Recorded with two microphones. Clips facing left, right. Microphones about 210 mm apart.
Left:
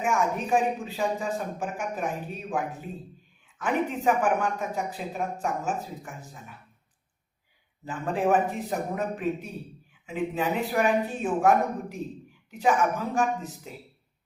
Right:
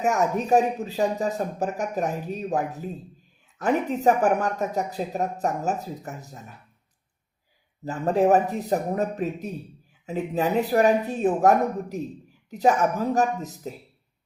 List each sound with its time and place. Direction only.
0.0 s speech: 40° right (ahead or behind)
7.9 s speech: 40° right (ahead or behind)